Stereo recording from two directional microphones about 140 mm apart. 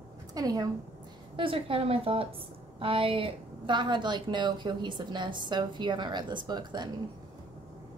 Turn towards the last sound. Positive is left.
turn(degrees=-30)  # may be behind; listen again after turning